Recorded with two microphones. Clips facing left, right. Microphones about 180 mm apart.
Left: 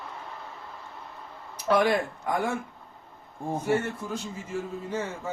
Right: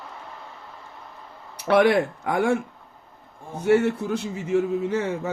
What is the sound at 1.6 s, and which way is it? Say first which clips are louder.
A man's voice: right 5 dB; 70° right (ahead or behind).